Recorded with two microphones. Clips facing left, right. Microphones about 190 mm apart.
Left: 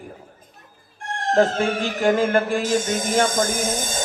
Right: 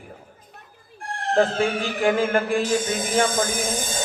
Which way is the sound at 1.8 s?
35° left (ahead or behind).